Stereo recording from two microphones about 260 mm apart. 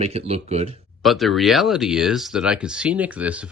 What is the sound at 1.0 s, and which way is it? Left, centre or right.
Speech, centre.